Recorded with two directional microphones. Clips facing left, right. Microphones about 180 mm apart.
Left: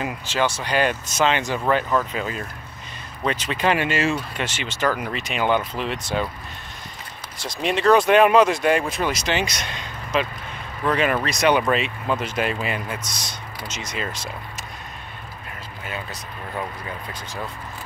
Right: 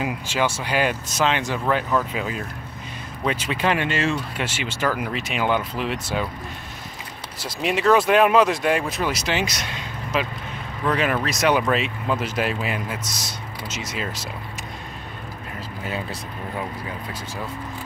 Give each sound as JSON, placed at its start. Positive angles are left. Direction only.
{"t": 0.0, "sound": "speech", "side_deg": -10}
{"t": 4.4, "sound": "speech", "side_deg": -10}
{"t": 7.4, "sound": "speech", "side_deg": -5}
{"t": 15.8, "sound": "speech", "side_deg": -30}